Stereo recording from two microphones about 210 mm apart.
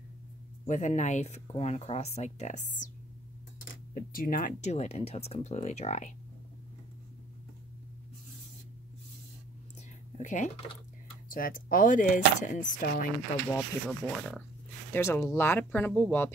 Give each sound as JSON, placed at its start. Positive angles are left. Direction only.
{"t": 0.7, "sound": "speech", "side_deg": 35}
{"t": 3.9, "sound": "speech", "side_deg": 45}
{"t": 10.1, "sound": "speech", "side_deg": 35}
{"t": 13.6, "sound": "speech", "side_deg": 0}